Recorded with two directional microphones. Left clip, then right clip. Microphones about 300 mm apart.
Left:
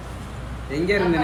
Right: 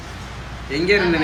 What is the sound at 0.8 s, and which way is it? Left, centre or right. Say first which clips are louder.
Speech: right 4 dB; centre.